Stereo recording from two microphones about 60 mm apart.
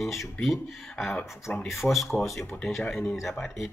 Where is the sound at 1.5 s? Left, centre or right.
Left.